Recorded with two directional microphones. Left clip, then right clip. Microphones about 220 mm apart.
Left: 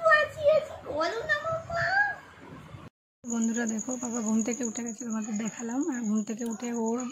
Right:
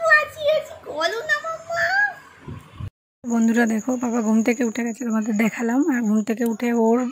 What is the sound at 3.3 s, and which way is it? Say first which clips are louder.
Speech: right 11 dB; 30° right (ahead or behind).